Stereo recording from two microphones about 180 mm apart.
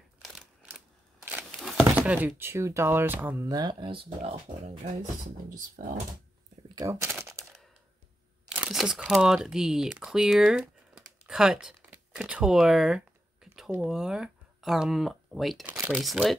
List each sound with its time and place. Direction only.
0.2 s a sound: centre (ahead or behind)
1.9 s speech: 10° right (ahead or behind)
3.4 s speech: 20° right (ahead or behind)
5.8 s speech: 50° right (ahead or behind)
6.7 s a sound: 20° right (ahead or behind)
8.5 s speech: 5° right (ahead or behind)
15.6 s speech: 10° right (ahead or behind)
16.0 s speech: centre (ahead or behind)